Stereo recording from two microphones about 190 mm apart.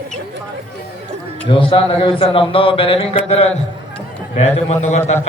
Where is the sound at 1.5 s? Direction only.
30° left (ahead or behind).